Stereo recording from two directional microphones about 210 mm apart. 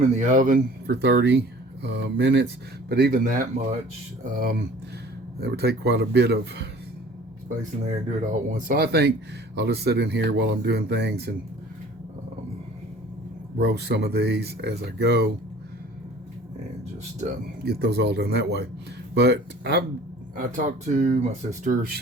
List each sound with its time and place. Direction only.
0.2 s speech: 35° right (ahead or behind)
0.9 s speech: 55° right (ahead or behind)
7.9 s speech: 35° right (ahead or behind); by 11.3 s 50° right (ahead or behind)
13.6 s speech: 50° right (ahead or behind)
17.7 s speech: 50° right (ahead or behind)
20.3 s speech: 40° right (ahead or behind)